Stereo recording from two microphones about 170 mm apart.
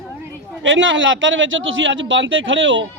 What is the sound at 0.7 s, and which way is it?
A man's voice, 90° right.